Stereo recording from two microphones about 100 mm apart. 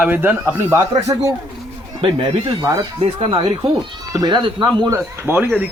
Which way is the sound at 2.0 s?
60° right (ahead or behind).